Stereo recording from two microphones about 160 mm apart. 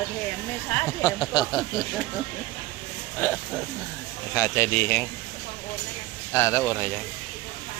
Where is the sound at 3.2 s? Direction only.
15° left (ahead or behind).